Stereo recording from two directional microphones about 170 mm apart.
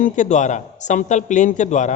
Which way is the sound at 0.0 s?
45° left (ahead or behind).